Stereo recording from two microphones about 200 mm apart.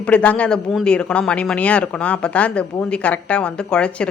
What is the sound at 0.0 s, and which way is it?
Speech, 5° left (ahead or behind).